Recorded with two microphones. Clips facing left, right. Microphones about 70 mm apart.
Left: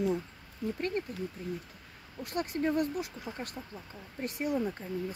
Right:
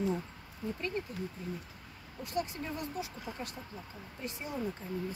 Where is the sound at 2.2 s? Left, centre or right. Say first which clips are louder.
Left 4 dB; left.